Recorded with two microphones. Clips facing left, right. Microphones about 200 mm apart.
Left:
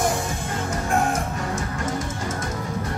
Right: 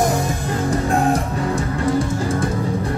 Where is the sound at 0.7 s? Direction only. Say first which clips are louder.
Right 5 dB; 35° right (ahead or behind).